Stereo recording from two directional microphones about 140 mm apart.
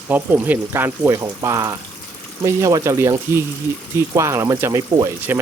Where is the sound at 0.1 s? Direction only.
10° right (ahead or behind).